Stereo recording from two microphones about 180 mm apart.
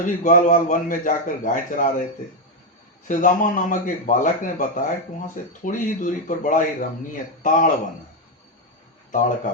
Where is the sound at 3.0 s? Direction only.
45° left (ahead or behind).